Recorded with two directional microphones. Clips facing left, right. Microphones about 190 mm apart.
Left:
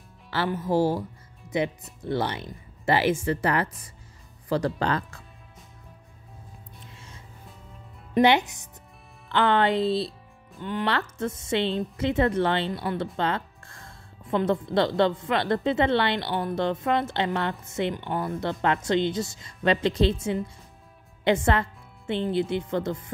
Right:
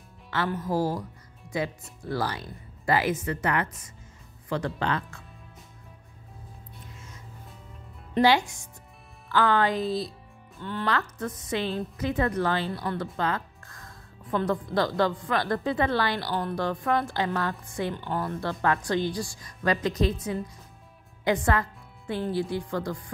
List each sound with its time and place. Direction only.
0.6 s a woman's voice: 25° left (ahead or behind)
8.1 s a woman's voice: 20° left (ahead or behind)
10.6 s speech: 15° left (ahead or behind)
10.9 s a woman's voice: 25° left (ahead or behind)